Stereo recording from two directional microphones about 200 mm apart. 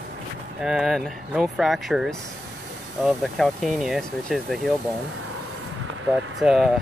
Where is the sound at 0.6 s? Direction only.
Centre (ahead or behind).